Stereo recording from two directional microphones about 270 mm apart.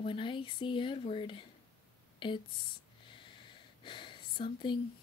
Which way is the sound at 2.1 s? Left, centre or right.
Centre.